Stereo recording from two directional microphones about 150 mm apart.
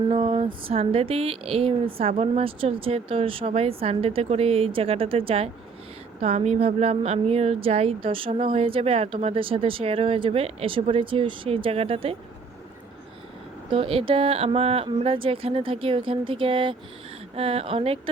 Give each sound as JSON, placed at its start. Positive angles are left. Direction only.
{"t": 0.1, "sound": "a woman's voice", "side_deg": -35}
{"t": 13.7, "sound": "a woman's voice", "side_deg": -35}